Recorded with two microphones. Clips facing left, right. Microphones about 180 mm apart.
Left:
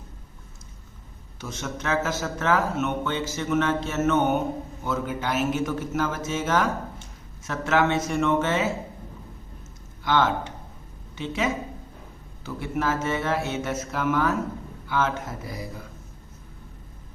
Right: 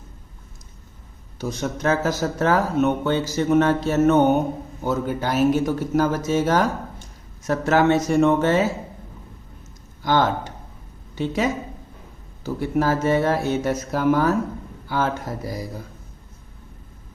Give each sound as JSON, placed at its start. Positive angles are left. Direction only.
{"t": 1.4, "sound": "speech", "side_deg": -35}
{"t": 10.0, "sound": "a woman's voice", "side_deg": -40}